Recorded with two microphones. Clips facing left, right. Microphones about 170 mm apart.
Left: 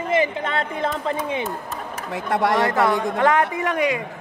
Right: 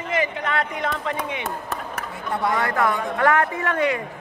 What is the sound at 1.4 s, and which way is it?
Chop, 65° right (ahead or behind).